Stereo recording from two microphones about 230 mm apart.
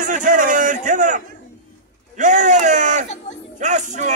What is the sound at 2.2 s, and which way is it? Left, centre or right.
Bellow, right.